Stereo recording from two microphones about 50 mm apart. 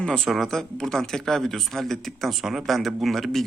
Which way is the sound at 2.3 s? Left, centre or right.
Centre.